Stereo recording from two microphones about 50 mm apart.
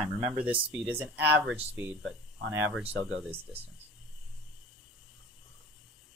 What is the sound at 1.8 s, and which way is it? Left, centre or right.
Speech, right.